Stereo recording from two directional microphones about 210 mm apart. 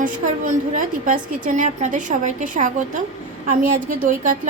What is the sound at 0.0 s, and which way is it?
A woman's voice, 35° right (ahead or behind).